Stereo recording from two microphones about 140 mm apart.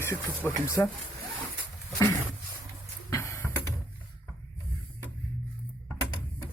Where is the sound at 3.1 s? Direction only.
25° left (ahead or behind).